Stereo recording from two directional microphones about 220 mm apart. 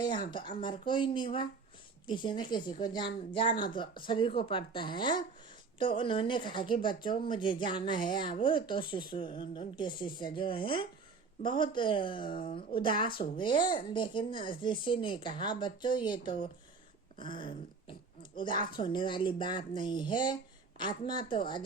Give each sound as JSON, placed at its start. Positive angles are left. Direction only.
{"t": 0.0, "sound": "speech", "side_deg": 20}